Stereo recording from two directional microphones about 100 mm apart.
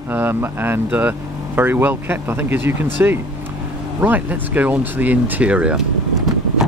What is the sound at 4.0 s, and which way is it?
Speech, 20° right (ahead or behind).